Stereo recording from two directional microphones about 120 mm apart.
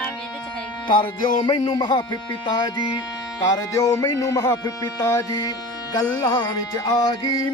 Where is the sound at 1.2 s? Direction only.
40° left (ahead or behind).